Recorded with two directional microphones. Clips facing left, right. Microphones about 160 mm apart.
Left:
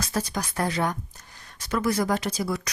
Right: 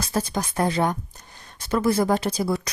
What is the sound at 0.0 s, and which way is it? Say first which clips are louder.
Speech: right 3 dB; 30° right (ahead or behind).